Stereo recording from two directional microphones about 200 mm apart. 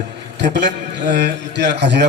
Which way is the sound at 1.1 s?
50° right (ahead or behind).